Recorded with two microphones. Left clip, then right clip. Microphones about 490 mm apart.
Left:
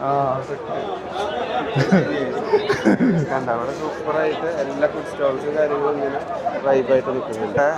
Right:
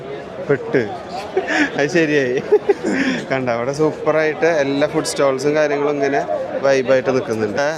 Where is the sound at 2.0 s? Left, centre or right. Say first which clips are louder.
Right 6 dB; right.